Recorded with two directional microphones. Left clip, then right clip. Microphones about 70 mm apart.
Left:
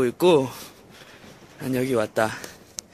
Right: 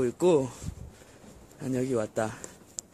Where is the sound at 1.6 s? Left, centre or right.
Right.